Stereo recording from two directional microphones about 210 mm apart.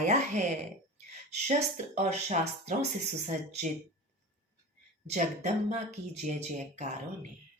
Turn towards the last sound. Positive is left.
turn(degrees=-35)  # may be behind; listen again after turning